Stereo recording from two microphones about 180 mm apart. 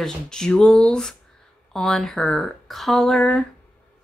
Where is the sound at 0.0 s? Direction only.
5° left (ahead or behind).